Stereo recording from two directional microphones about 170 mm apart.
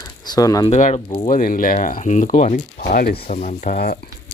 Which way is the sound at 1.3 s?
55° left (ahead or behind).